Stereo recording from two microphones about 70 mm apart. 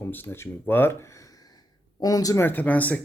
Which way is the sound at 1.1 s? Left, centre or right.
Left.